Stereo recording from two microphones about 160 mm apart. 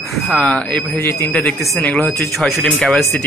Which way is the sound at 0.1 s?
5° left (ahead or behind).